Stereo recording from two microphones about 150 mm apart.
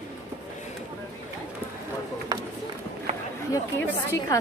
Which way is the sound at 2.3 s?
30° right (ahead or behind).